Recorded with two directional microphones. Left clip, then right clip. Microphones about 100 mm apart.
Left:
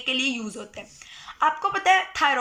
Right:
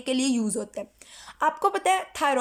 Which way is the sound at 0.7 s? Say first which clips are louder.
Right 3 dB; 50° right (ahead or behind).